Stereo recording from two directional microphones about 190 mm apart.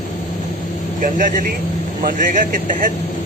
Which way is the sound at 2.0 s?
45° right (ahead or behind).